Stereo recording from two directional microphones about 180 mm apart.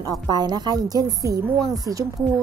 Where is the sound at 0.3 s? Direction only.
25° right (ahead or behind).